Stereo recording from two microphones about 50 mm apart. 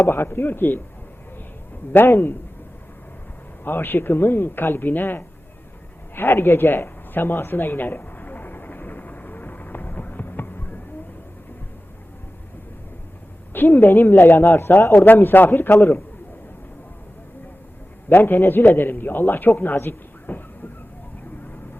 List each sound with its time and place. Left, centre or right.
0.0 s a man's voice: left
1.9 s a man's voice: left
3.6 s a man's voice: left
6.1 s a sound: left
13.5 s a man's voice: left
18.1 s a man's voice: left